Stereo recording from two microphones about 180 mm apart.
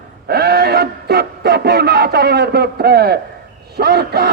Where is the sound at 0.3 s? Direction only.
60° right (ahead or behind).